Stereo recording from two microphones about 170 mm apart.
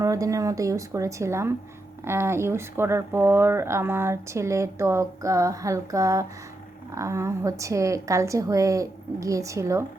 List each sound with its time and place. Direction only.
0.0 s speech: 20° right (ahead or behind)